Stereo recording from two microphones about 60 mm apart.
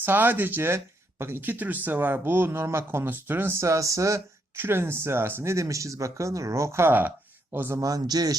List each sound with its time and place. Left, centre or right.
0.0 s speech: right
3.1 s speech: right
4.5 s speech: right
7.5 s speech: right
7.8 s a man's voice: right